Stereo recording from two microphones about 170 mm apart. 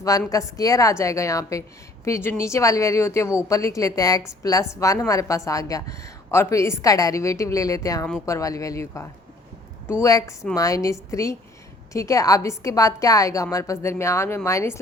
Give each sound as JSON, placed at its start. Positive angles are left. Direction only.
{"t": 0.3, "sound": "a woman's voice", "side_deg": 20}